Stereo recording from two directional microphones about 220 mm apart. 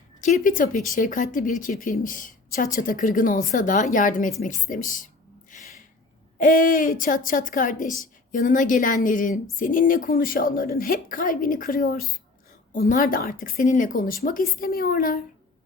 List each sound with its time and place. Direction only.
0.2 s a woman's voice: 35° left (ahead or behind)
6.4 s a woman's voice: 40° left (ahead or behind)